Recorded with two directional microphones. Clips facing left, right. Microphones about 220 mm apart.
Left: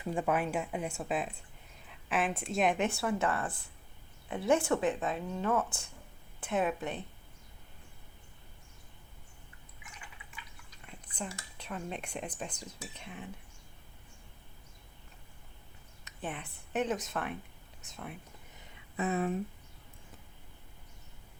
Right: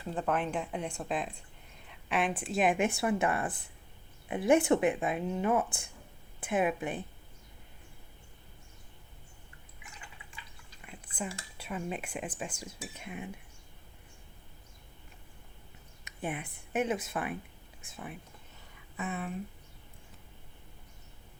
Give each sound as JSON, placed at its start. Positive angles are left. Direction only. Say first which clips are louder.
{"t": 0.0, "sound": "speech", "louder": "left 1 dB", "side_deg": 10}
{"t": 11.2, "sound": "speech", "louder": "right 2 dB", "side_deg": -5}
{"t": 16.0, "sound": "speech", "louder": "right 3 dB", "side_deg": -10}
{"t": 18.9, "sound": "speech", "louder": "left 6 dB", "side_deg": 40}